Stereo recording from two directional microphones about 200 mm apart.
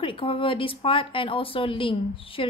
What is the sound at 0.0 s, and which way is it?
Speech, 25° left (ahead or behind).